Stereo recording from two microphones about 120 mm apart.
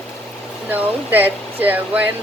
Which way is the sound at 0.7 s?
15° right (ahead or behind).